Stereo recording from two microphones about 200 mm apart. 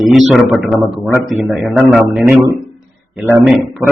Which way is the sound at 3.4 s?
Centre (ahead or behind).